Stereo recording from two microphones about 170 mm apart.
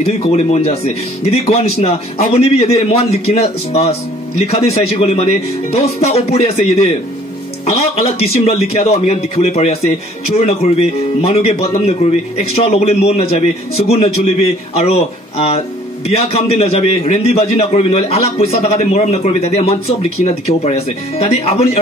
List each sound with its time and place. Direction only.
0.0 s speech: 40° left (ahead or behind)